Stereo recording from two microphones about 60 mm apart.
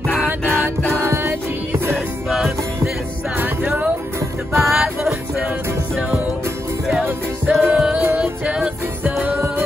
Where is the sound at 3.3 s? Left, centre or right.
Right.